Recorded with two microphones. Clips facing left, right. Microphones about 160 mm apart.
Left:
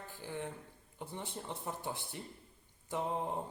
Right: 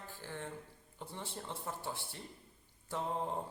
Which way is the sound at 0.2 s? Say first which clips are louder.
Left 3 dB; 15° left (ahead or behind).